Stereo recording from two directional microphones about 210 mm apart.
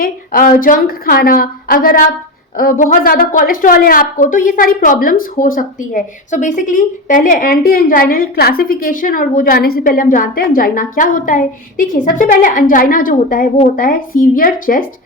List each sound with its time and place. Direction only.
0.0 s a woman's voice: 40° left (ahead or behind)